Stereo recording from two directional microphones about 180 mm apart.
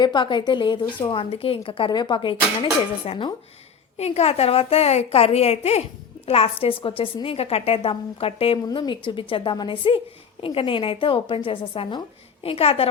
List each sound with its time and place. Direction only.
0.0 s a woman's voice: 25° left (ahead or behind)